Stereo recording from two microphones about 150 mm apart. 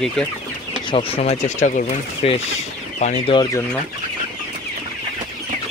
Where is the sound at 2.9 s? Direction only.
55° left (ahead or behind).